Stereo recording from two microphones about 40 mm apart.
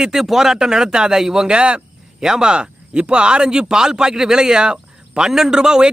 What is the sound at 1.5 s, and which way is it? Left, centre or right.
Speech, right.